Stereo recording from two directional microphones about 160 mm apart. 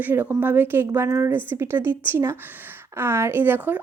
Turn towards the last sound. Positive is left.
turn(degrees=-10)  # may be behind; listen again after turning